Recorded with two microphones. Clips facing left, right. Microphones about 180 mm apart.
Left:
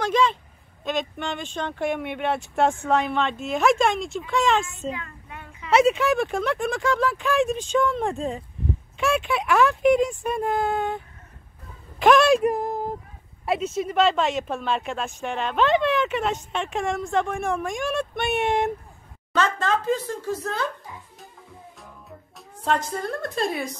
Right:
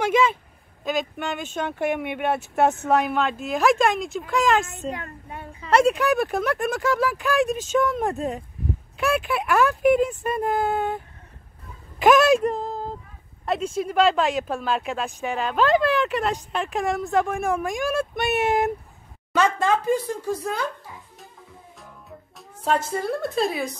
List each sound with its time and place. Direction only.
0.0 s a sound: 10° right (ahead or behind)
0.8 s speech: centre (ahead or behind)
4.9 s child singing: 40° right (ahead or behind)
5.7 s speech: 5° left (ahead or behind)
12.0 s a woman's voice: centre (ahead or behind)
12.4 s a sound: 15° left (ahead or behind)
13.5 s speech: 5° left (ahead or behind); by 20.6 s 10° right (ahead or behind)
22.6 s speech: 5° right (ahead or behind)